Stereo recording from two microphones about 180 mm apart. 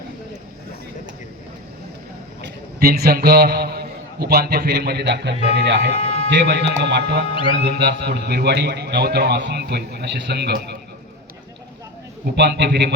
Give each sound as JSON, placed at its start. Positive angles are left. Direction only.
{"t": 2.4, "sound": "a man's voice", "side_deg": -60}
{"t": 7.3, "sound": "speech", "side_deg": 30}
{"t": 7.6, "sound": "a man's voice", "side_deg": -65}
{"t": 12.4, "sound": "speech", "side_deg": -70}